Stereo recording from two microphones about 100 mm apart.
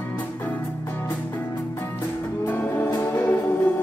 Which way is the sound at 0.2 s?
15° left (ahead or behind).